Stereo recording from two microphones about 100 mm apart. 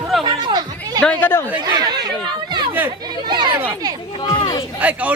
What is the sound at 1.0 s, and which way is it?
Speech, 15° left (ahead or behind).